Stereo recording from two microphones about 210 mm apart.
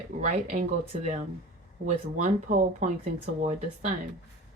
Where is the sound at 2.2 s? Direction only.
35° right (ahead or behind).